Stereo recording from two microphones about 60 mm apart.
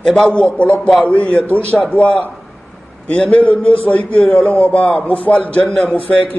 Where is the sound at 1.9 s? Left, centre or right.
Left.